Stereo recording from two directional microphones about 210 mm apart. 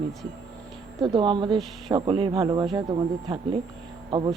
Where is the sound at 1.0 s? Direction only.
25° right (ahead or behind).